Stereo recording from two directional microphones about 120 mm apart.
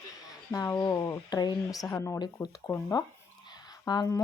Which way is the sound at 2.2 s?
35° left (ahead or behind).